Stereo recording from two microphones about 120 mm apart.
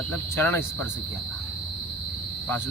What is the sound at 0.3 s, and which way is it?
Cricket, 20° left (ahead or behind).